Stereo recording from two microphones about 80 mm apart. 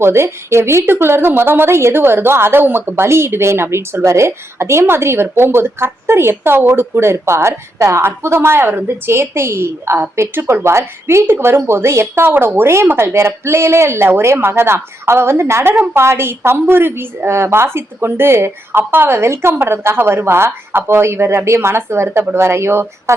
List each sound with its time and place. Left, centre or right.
0.0 s a woman's voice: right